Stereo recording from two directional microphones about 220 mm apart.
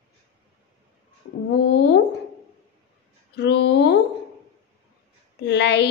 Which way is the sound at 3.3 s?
50° left (ahead or behind).